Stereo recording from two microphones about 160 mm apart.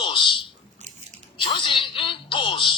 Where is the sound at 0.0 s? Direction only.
30° left (ahead or behind).